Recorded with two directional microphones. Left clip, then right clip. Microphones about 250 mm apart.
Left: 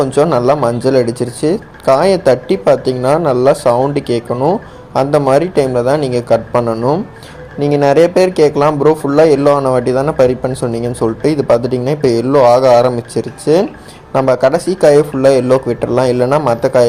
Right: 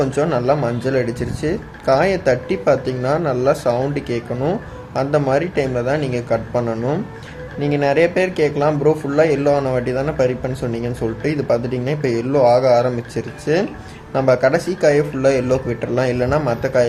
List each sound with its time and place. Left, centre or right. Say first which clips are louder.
0.0 s speech: left 7 dB; centre
6.7 s speech: left 7 dB; centre
7.6 s speech: left 6 dB; centre